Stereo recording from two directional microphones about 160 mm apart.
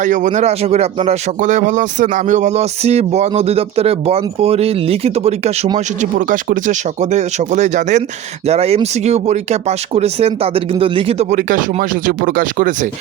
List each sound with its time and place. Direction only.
0.0 s speech: 50° right (ahead or behind)
5.7 s speech: 55° right (ahead or behind)